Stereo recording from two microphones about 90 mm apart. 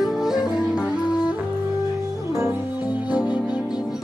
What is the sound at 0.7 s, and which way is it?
Music, 10° right (ahead or behind).